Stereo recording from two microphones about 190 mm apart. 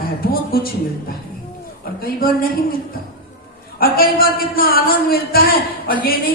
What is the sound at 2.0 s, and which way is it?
Speech, 50° left (ahead or behind).